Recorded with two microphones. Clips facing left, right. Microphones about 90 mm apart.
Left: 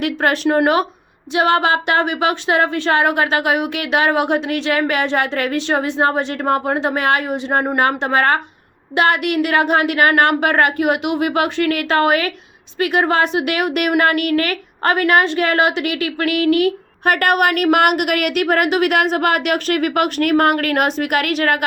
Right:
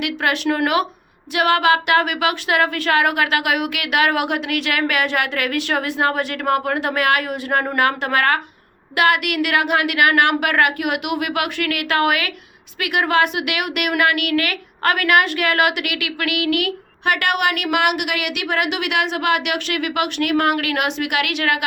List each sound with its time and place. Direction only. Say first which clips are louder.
0.0 s a woman's voice: left 3 dB; 35° left (ahead or behind)